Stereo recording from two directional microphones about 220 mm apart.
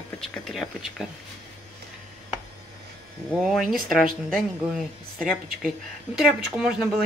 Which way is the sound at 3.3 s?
Centre (ahead or behind).